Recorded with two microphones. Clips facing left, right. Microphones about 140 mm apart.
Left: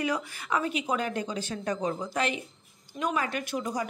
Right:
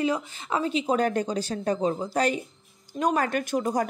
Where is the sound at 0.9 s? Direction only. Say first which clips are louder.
Right 6 dB; 45° right (ahead or behind).